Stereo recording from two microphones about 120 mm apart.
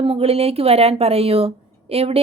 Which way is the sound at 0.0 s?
55° right (ahead or behind).